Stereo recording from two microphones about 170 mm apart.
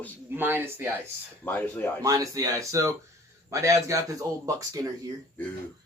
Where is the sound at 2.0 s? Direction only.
20° right (ahead or behind).